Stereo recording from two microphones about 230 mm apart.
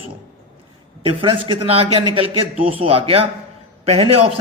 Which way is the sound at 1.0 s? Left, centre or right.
Right.